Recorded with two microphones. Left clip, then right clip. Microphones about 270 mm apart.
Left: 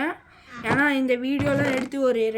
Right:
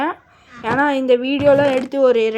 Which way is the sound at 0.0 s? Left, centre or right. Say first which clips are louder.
Right 6 dB; centre.